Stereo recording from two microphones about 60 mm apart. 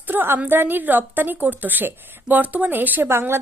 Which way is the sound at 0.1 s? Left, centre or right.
Right.